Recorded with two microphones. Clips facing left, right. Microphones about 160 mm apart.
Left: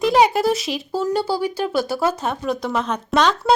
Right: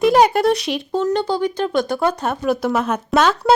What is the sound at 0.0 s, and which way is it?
Speech, centre (ahead or behind).